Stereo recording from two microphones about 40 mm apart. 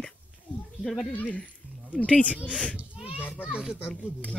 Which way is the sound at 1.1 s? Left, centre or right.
Left.